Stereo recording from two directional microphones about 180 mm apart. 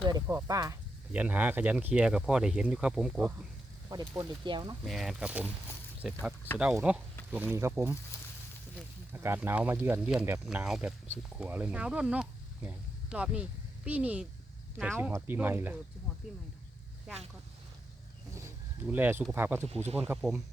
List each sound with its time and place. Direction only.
0.0 s speech: 20° right (ahead or behind)
1.1 s speech: 10° right (ahead or behind)
4.2 s speech: 25° right (ahead or behind)
4.9 s speech: centre (ahead or behind)
9.1 s speech: 10° right (ahead or behind)
18.3 s a sound: 15° right (ahead or behind)
19.3 s speech: 10° right (ahead or behind)
19.7 s speech: 35° right (ahead or behind)